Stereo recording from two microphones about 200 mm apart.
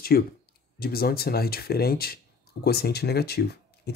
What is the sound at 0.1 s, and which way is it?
Speech, 50° left (ahead or behind).